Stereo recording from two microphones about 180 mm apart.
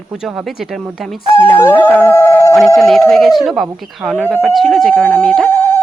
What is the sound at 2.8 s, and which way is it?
Speech, centre (ahead or behind).